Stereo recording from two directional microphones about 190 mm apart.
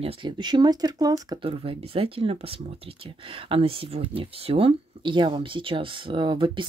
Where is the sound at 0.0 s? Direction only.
25° right (ahead or behind).